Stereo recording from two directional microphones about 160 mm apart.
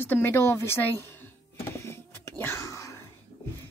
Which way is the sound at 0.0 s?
15° left (ahead or behind).